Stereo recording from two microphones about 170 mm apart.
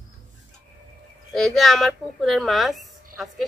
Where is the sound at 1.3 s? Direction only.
Centre (ahead or behind).